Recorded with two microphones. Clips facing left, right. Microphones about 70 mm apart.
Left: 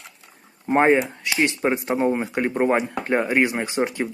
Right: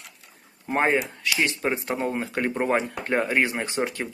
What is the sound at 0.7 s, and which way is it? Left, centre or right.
Speech, left.